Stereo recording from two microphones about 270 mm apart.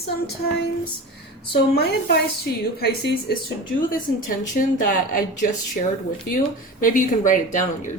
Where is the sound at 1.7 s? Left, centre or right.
Left.